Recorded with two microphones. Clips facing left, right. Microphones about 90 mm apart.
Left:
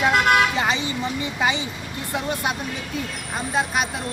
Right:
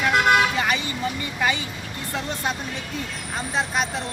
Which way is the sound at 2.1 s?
10° left (ahead or behind).